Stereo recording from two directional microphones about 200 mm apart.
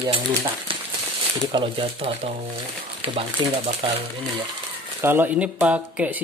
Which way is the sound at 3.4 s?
25° right (ahead or behind).